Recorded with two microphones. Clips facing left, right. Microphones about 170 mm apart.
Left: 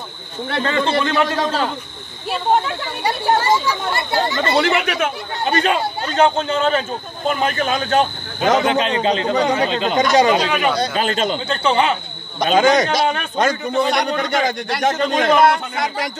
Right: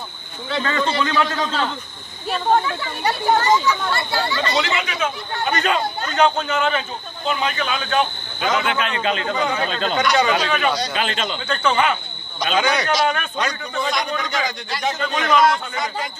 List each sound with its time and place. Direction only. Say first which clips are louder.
0.7 s speech: left 3 dB; 30° left (ahead or behind)
1.3 s a man's voice: left 3 dB; 35° left (ahead or behind)
3.0 s speech: left 1 dB; 10° left (ahead or behind)
3.8 s speech: left 3 dB; 20° left (ahead or behind)
4.4 s a man's voice: left 5 dB; 55° left (ahead or behind)
5.4 s a man's voice: left 3 dB; 25° left (ahead or behind)
9.6 s speech: left 4 dB; 15° left (ahead or behind)
9.9 s a man's voice: left 4 dB; 35° left (ahead or behind)
10.3 s speech: left 3 dB; 20° left (ahead or behind)
11.0 s a man's voice: left 5 dB; 40° left (ahead or behind)
11.3 s speech: left 3 dB; 25° left (ahead or behind)
12.4 s a man's voice: left 6 dB; 45° left (ahead or behind)
13.8 s a man's voice: left 5 dB; 65° left (ahead or behind)